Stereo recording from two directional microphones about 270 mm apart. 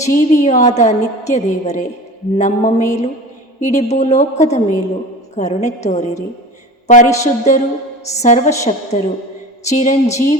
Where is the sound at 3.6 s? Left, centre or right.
Left.